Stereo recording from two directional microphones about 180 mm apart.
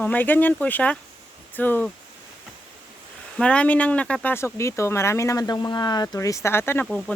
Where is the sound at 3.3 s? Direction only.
5° left (ahead or behind).